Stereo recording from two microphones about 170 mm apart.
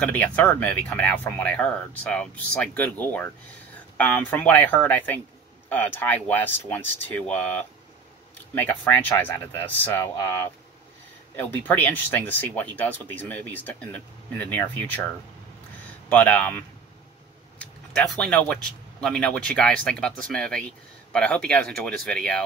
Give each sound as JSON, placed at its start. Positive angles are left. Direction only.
{"t": 0.0, "sound": "speech", "side_deg": 10}